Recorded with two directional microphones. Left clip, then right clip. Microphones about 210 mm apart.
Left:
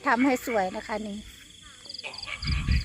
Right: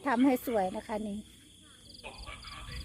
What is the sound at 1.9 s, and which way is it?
Frog, 45° right (ahead or behind).